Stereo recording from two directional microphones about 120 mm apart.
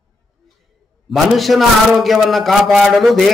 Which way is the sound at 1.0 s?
Centre (ahead or behind).